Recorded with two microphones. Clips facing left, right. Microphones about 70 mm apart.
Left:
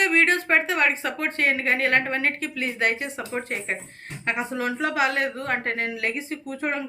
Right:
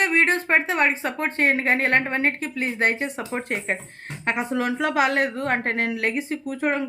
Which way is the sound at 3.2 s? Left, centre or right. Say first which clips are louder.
Right 1 dB; right.